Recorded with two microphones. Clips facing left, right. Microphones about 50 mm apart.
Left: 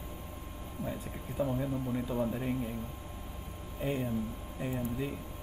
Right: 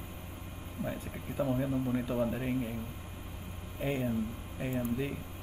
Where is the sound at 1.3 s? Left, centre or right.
Centre.